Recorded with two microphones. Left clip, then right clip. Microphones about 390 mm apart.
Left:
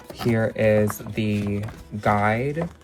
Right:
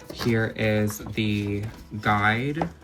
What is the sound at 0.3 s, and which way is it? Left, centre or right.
Speech, centre.